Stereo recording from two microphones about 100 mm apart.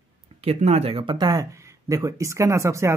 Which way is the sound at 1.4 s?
30° right (ahead or behind).